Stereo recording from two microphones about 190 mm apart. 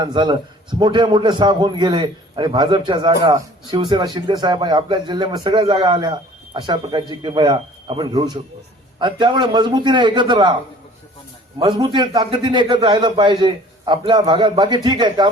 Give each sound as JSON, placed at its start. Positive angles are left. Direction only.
{"t": 0.0, "sound": "a man's voice", "side_deg": -25}
{"t": 11.6, "sound": "a man's voice", "side_deg": -20}